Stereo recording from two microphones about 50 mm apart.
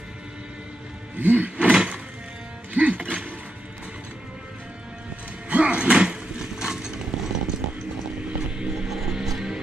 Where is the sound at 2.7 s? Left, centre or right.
Right.